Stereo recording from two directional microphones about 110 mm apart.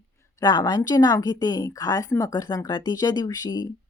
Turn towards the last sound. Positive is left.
turn(degrees=40)  # may be behind; listen again after turning